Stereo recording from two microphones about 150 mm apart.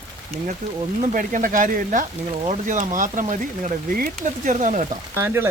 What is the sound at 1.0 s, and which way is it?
Speech, 60° right (ahead or behind).